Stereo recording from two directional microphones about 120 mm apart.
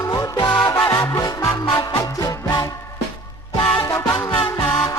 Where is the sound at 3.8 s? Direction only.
25° left (ahead or behind).